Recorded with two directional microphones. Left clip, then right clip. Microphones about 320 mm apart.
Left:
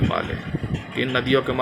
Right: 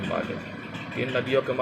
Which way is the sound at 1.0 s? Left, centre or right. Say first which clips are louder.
Left 4 dB; left.